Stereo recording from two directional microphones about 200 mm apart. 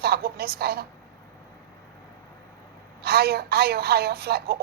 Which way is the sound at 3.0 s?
50° right (ahead or behind).